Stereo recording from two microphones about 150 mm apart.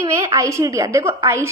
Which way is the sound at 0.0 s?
20° right (ahead or behind).